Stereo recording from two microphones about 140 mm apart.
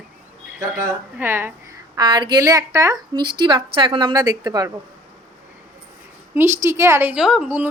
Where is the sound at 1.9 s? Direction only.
30° right (ahead or behind).